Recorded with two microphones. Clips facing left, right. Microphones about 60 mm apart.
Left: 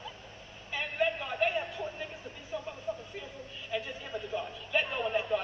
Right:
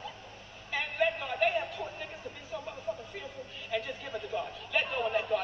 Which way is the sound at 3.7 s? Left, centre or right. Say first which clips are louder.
Right 1 dB; centre.